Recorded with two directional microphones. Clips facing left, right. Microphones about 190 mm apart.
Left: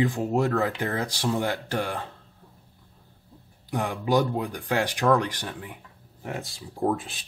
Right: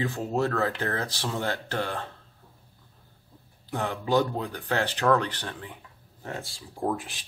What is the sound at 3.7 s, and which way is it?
Speech, 10° left (ahead or behind).